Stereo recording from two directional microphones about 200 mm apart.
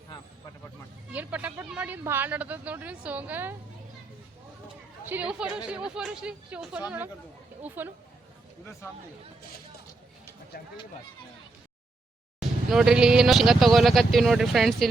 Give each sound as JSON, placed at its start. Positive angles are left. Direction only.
{"t": 1.1, "sound": "speech", "side_deg": -10}
{"t": 5.0, "sound": "speech", "side_deg": -5}
{"t": 10.5, "sound": "speech", "side_deg": 50}
{"t": 12.7, "sound": "speech", "side_deg": -5}